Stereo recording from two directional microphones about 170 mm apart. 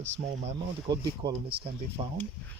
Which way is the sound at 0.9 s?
25° right (ahead or behind).